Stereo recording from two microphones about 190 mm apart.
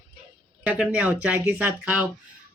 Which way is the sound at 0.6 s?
5° right (ahead or behind).